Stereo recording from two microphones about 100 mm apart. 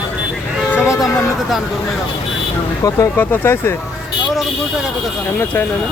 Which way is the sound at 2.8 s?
35° left (ahead or behind).